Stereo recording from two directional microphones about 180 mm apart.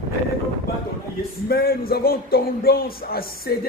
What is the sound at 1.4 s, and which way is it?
A man's voice, 55° left (ahead or behind).